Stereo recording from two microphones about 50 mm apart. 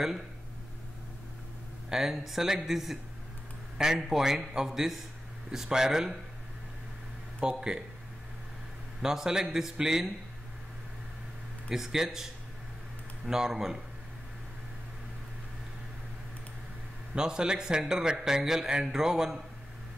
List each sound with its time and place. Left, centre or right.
1.9 s a man's voice: centre
7.3 s speech: centre
9.0 s a man's voice: centre
11.7 s a man's voice: centre
17.1 s a man's voice: centre